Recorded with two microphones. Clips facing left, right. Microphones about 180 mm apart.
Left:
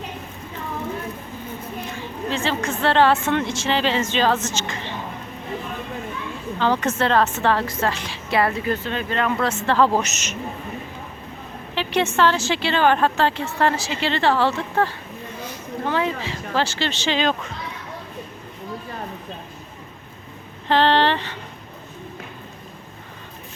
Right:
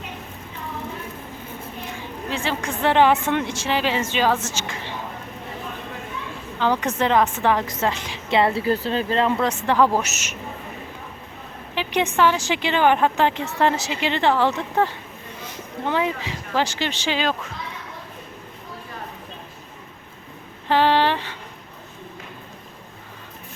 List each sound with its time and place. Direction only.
1.9 s a woman's voice: 10° right (ahead or behind)
6.6 s a woman's voice: 15° right (ahead or behind); by 9.3 s 30° right (ahead or behind)
9.4 s speech: 15° right (ahead or behind)
11.7 s speech: 15° right (ahead or behind)
20.7 s speech: 10° right (ahead or behind)